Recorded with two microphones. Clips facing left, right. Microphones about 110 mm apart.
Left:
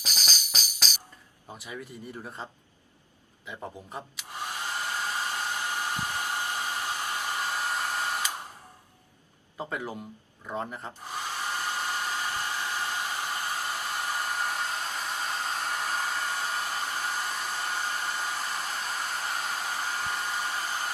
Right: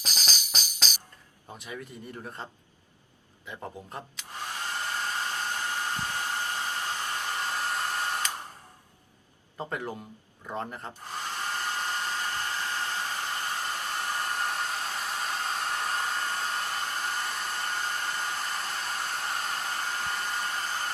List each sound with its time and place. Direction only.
0.0 s tambourine: centre (ahead or behind)
1.5 s a man's voice: 5° left (ahead or behind)
3.4 s hair dryer: 10° left (ahead or behind)
9.6 s speech: 5° left (ahead or behind)
10.4 s hair dryer: 5° left (ahead or behind)